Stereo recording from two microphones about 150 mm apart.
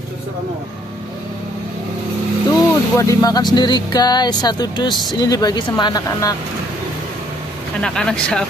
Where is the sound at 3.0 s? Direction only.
20° left (ahead or behind).